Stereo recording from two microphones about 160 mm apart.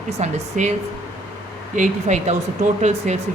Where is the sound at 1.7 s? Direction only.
50° right (ahead or behind).